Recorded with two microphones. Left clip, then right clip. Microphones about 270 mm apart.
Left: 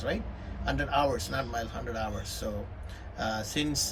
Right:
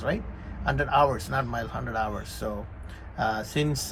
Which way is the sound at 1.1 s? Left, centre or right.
Centre.